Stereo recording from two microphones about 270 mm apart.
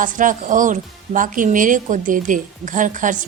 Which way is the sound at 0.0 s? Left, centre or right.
Right.